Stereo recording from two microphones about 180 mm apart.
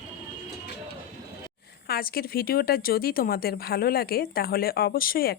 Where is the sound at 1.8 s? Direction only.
55° left (ahead or behind).